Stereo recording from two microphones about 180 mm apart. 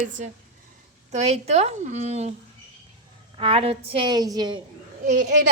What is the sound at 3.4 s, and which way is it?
A woman's voice, 30° right (ahead or behind).